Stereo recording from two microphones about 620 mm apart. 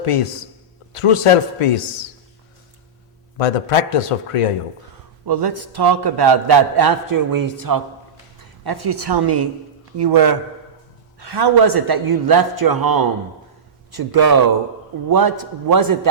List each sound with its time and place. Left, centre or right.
0.0 s a man's voice: left
3.3 s a man's voice: left
5.2 s a man's voice: right